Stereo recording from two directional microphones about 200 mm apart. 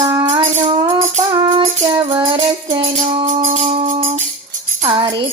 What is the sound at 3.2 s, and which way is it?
Music, 40° right (ahead or behind).